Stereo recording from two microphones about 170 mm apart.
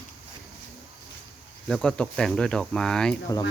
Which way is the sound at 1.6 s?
5° left (ahead or behind).